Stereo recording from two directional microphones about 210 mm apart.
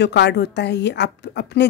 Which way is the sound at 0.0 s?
55° left (ahead or behind).